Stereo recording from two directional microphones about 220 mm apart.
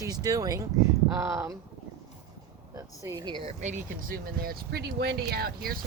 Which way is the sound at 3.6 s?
35° right (ahead or behind).